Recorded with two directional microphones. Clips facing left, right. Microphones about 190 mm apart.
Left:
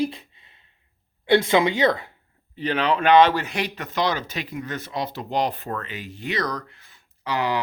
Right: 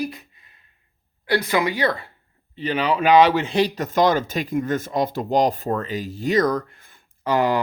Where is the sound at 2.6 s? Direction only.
10° right (ahead or behind).